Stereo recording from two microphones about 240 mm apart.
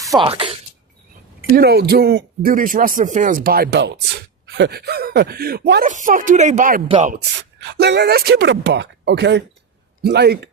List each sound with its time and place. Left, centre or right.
0.1 s speech: right
1.5 s speech: right
7.1 s speech: right